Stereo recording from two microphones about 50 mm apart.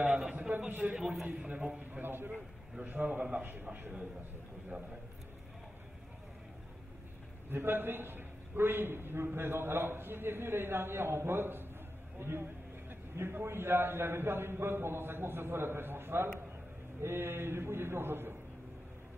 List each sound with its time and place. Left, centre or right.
0.0 s a sound: centre
0.4 s a sound: right
1.4 s a man's voice: centre
1.9 s a man's voice: right
2.8 s a man's voice: right
7.4 s a man's voice: right